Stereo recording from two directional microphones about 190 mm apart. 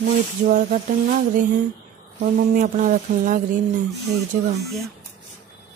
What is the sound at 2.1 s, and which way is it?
Speech, 40° right (ahead or behind).